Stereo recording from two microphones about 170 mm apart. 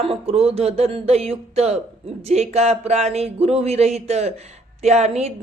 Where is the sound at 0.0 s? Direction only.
35° right (ahead or behind).